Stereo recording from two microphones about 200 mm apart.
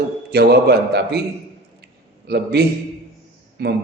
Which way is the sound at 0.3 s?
55° right (ahead or behind).